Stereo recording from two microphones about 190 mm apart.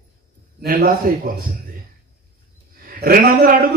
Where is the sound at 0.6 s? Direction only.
50° right (ahead or behind).